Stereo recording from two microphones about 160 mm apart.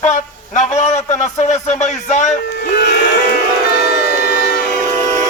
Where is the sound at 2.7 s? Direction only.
90° left.